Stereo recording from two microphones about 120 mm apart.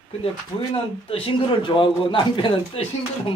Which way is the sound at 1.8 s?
45° left (ahead or behind).